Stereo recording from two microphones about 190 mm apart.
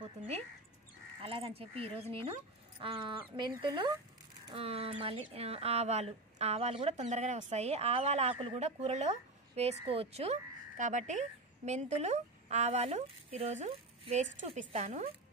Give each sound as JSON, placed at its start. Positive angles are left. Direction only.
{"t": 1.2, "sound": "speech", "side_deg": -30}